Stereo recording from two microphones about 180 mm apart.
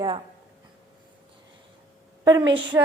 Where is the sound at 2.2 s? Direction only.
20° right (ahead or behind).